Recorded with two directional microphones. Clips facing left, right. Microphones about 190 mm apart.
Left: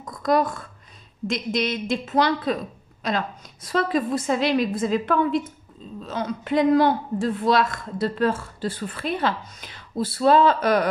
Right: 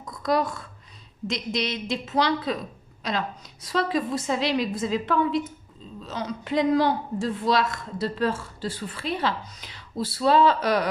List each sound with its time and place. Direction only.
0.0 s a woman's voice: 50° left (ahead or behind)